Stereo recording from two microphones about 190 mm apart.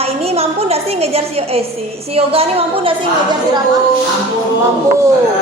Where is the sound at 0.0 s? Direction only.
30° right (ahead or behind).